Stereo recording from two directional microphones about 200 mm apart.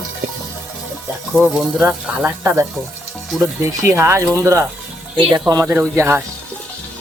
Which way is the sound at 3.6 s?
15° right (ahead or behind).